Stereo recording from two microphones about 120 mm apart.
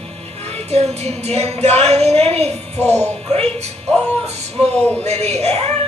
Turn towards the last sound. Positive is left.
turn(degrees=-60)  # may be behind; listen again after turning